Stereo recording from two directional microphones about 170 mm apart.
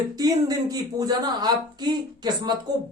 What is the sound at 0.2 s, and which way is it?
A woman's voice, 20° right (ahead or behind).